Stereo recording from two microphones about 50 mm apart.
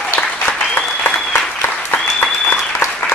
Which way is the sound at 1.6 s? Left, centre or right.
Left.